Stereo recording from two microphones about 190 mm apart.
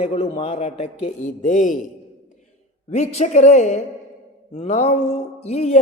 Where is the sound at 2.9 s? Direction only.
35° left (ahead or behind).